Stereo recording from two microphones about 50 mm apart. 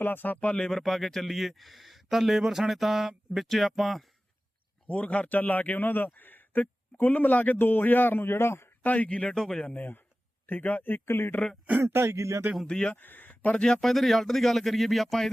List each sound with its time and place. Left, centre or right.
0.0 s speech: left
0.5 s speech: centre
4.9 s speech: left
8.8 s speech: left
11.0 s speech: left
11.9 s speech: right
12.1 s speech: right
12.6 s speech: centre
13.0 s speech: left
13.8 s speech: centre